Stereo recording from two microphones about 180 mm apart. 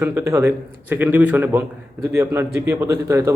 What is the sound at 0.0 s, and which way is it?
A man's voice, 10° right (ahead or behind).